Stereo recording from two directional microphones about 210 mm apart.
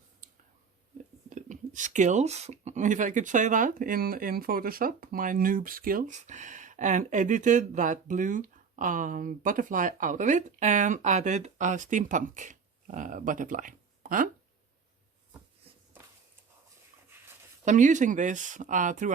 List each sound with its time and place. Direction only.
0.2 s whispering: 40° right (ahead or behind)
1.3 s speech: 35° right (ahead or behind)
17.7 s speech: 35° right (ahead or behind)